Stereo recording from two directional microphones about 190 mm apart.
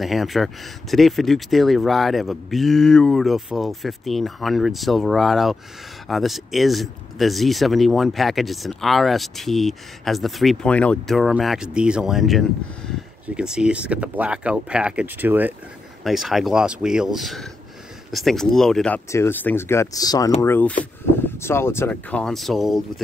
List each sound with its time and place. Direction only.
0.0 s speech: centre (ahead or behind)
19.0 s speech: 15° left (ahead or behind)